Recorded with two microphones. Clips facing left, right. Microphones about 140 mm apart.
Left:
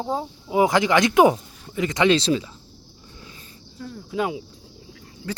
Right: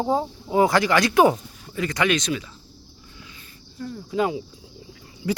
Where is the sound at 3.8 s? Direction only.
Centre (ahead or behind).